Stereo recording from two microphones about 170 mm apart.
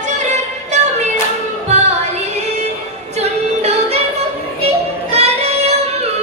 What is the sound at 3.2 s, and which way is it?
Music, 40° right (ahead or behind).